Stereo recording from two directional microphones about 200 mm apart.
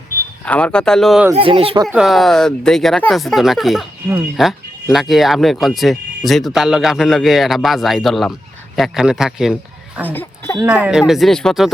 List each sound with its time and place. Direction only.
0.4 s speech: 5° left (ahead or behind)
1.4 s speech: 25° right (ahead or behind)
1.9 s a man's voice: centre (ahead or behind)
10.1 s speech: 10° left (ahead or behind)
10.6 s speech: 5° right (ahead or behind)